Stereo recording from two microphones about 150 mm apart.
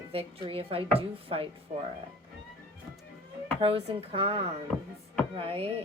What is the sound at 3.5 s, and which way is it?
Speech, 40° right (ahead or behind).